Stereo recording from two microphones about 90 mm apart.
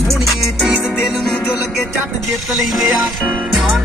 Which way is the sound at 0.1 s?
Centre (ahead or behind).